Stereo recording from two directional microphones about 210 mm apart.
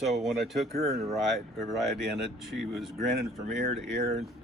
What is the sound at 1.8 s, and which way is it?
Speech, centre (ahead or behind).